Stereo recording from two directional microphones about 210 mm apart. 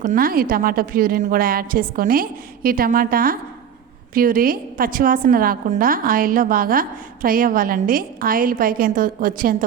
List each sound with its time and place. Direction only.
0.0 s a woman's voice: 40° right (ahead or behind)